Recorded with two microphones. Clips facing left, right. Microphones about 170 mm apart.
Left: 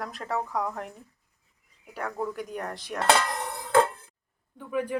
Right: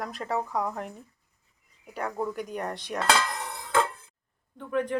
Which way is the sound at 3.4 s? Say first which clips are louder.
Left 4 dB; 35° left (ahead or behind).